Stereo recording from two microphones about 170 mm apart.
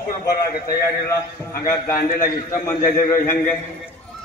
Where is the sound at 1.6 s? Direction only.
60° left (ahead or behind).